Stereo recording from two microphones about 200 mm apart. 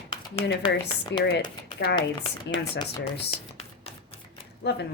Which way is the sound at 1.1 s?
60° left (ahead or behind).